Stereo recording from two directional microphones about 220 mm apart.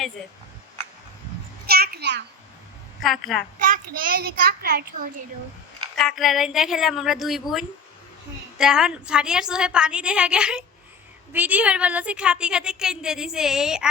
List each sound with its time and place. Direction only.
1.6 s a sound: 45° right (ahead or behind)
3.0 s a woman's voice: centre (ahead or behind)
3.7 s a child's voice: 40° right (ahead or behind)
6.0 s a woman's voice: centre (ahead or behind)
8.5 s a woman's voice: 5° right (ahead or behind)